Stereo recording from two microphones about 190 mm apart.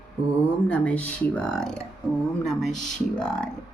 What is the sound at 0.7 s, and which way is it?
Speech, 5° left (ahead or behind).